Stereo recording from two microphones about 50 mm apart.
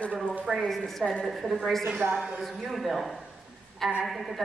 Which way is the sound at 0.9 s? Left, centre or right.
Centre.